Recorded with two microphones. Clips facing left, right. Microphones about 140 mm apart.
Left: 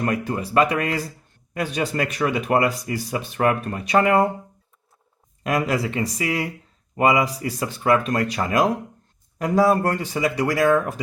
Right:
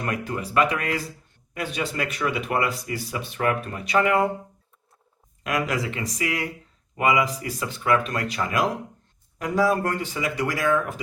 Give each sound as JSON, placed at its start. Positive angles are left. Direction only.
{"t": 0.0, "sound": "speech", "side_deg": 35}
{"t": 5.4, "sound": "speech", "side_deg": 35}